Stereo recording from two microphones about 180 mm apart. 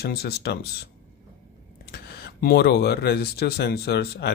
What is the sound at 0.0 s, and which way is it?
Speech, 60° left (ahead or behind).